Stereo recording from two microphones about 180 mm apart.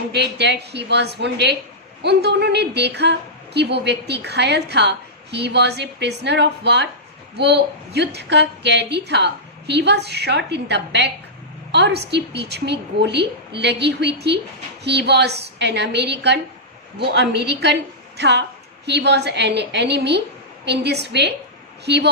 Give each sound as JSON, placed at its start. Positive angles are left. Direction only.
{"t": 0.1, "sound": "a woman's voice", "side_deg": -70}